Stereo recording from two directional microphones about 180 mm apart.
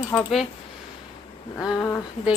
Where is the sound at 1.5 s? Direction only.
Centre (ahead or behind).